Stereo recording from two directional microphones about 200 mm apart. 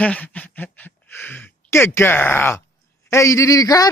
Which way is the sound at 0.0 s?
5° left (ahead or behind).